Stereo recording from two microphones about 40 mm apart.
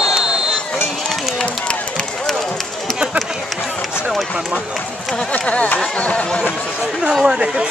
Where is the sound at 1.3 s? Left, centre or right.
Left.